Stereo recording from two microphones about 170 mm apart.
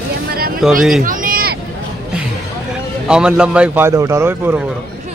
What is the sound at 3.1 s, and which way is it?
A man's voice, 5° right (ahead or behind).